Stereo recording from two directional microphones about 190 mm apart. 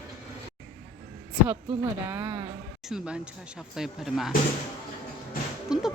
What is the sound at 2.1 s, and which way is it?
Speech, 10° right (ahead or behind).